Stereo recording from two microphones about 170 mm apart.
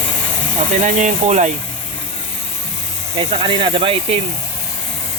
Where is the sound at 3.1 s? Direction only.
30° right (ahead or behind).